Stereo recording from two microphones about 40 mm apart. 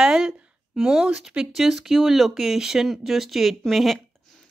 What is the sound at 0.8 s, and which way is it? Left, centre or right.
Speech, centre.